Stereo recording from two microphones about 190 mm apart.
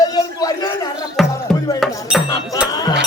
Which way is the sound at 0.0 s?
20° left (ahead or behind).